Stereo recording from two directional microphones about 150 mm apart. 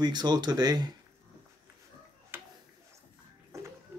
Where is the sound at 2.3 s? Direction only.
15° right (ahead or behind).